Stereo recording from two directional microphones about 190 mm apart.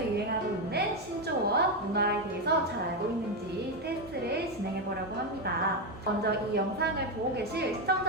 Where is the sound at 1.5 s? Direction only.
60° right (ahead or behind).